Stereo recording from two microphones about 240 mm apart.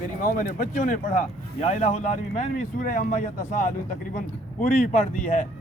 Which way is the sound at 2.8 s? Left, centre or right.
Left.